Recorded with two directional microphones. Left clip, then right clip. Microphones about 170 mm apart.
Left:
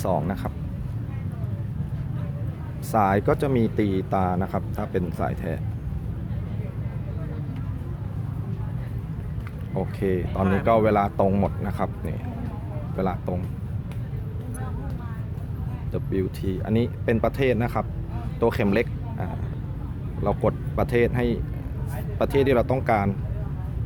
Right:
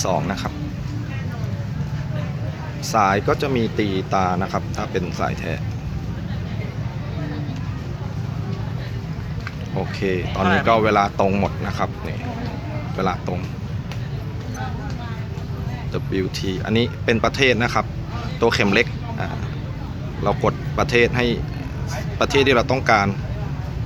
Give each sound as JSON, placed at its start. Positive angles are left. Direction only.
{"t": 0.0, "sound": "speech", "side_deg": 25}
{"t": 2.9, "sound": "speech", "side_deg": 30}
{"t": 9.7, "sound": "speech", "side_deg": 25}
{"t": 15.9, "sound": "speech", "side_deg": 20}